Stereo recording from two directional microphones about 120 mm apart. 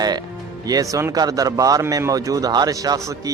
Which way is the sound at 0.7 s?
30° right (ahead or behind).